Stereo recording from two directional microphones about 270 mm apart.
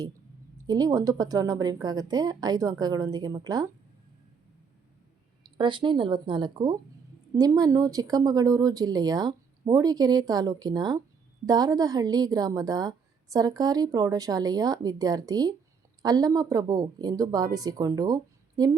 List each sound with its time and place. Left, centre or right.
0.7 s speech: centre
5.4 s speech: centre